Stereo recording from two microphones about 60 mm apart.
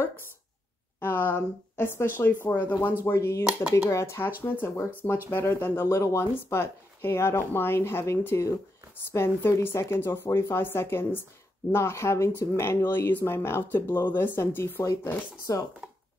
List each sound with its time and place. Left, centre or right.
0.9 s speech: left
4.2 s speech: left
15.5 s speech: left